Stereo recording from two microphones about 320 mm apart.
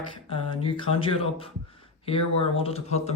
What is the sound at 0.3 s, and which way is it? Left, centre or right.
Speech, centre.